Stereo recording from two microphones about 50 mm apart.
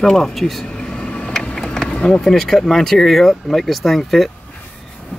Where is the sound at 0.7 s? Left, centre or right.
Centre.